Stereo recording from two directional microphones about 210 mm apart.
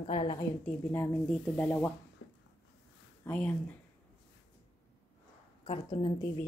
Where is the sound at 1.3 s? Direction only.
5° left (ahead or behind).